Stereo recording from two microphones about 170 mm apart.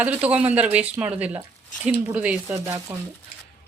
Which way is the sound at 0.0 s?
10° right (ahead or behind).